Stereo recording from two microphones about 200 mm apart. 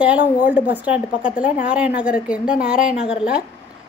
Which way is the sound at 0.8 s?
5° right (ahead or behind).